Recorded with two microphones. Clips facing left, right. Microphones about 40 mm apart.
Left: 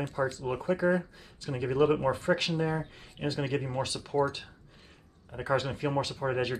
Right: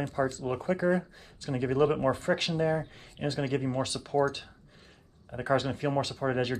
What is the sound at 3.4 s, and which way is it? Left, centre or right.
Speech, left.